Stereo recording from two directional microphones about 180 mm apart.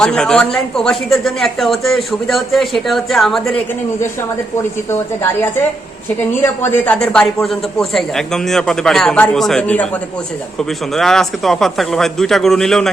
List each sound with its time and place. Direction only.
0.0 s a man's voice: 5° left (ahead or behind)
4.9 s a woman's voice: 15° left (ahead or behind)